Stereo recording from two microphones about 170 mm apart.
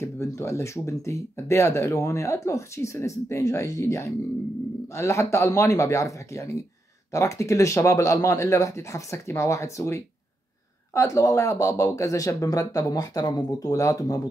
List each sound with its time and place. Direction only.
0.0 s speech: 15° left (ahead or behind)